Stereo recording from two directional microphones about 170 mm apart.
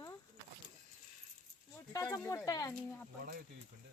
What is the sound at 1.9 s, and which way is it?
Speech, 20° left (ahead or behind).